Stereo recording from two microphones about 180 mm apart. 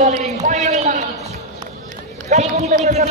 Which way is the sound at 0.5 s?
40° right (ahead or behind).